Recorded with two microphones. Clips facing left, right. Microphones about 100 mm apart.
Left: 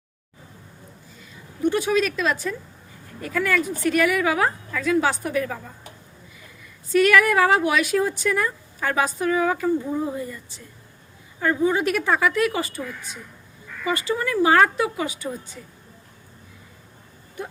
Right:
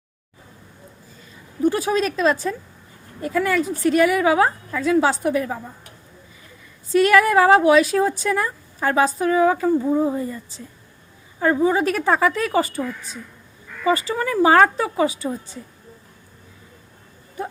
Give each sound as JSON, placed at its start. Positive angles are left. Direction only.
{"t": 1.6, "sound": "a woman's voice", "side_deg": -35}
{"t": 6.9, "sound": "a woman's voice", "side_deg": -30}
{"t": 13.8, "sound": "speech", "side_deg": -35}